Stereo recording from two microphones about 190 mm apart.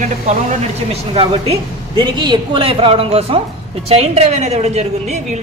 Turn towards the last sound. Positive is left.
turn(degrees=-35)  # may be behind; listen again after turning